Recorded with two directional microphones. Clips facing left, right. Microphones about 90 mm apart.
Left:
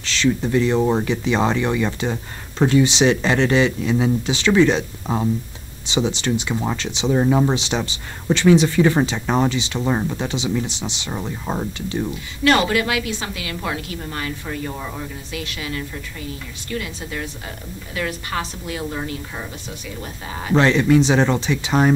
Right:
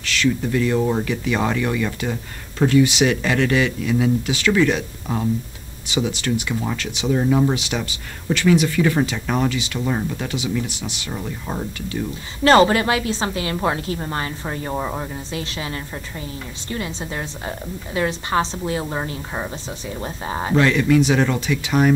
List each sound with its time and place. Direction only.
0.0 s speech: 25° left (ahead or behind)
12.4 s a woman's voice: 35° right (ahead or behind)
20.5 s speech: 30° left (ahead or behind)